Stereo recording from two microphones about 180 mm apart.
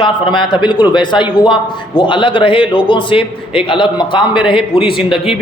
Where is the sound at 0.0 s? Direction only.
25° left (ahead or behind).